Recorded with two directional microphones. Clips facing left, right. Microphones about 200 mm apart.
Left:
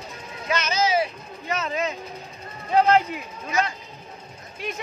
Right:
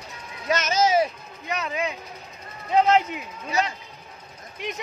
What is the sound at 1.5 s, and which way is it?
A man's voice, 15° right (ahead or behind).